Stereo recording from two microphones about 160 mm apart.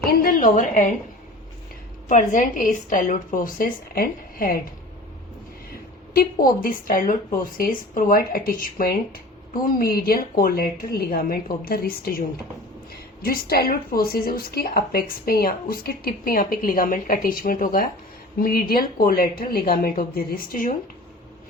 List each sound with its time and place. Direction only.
0.0 s a woman's voice: 65° left (ahead or behind)
2.0 s a woman's voice: 50° left (ahead or behind)
6.1 s a woman's voice: 60° left (ahead or behind)
13.2 s a woman's voice: 70° left (ahead or behind)